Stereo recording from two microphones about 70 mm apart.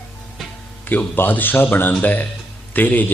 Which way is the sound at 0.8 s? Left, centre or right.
Left.